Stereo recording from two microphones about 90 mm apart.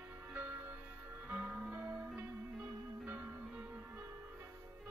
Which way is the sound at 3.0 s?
25° right (ahead or behind).